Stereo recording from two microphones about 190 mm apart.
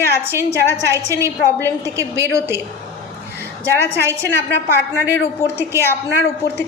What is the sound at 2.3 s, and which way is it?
Speech, 10° right (ahead or behind).